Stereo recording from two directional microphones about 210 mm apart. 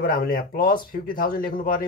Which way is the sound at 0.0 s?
45° left (ahead or behind).